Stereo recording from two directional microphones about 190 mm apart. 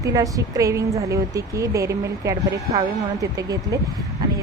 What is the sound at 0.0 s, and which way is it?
A woman's voice, 20° right (ahead or behind).